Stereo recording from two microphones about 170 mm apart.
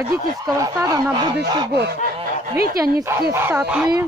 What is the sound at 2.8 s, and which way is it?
Speech, 15° right (ahead or behind).